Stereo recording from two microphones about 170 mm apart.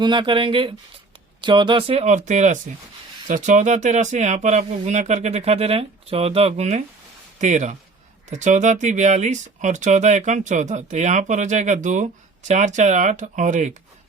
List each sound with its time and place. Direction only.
0.0 s speech: 25° right (ahead or behind); by 13.7 s 45° right (ahead or behind)